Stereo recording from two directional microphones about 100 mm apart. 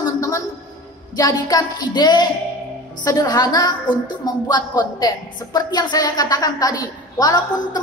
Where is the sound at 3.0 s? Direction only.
40° left (ahead or behind).